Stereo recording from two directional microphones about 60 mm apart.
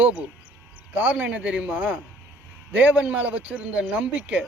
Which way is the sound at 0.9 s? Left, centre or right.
Right.